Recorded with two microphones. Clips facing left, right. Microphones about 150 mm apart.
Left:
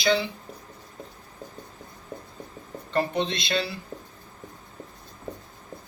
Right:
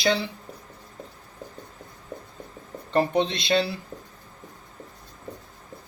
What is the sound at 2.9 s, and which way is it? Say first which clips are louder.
Speech: right 3 dB; 30° right (ahead or behind).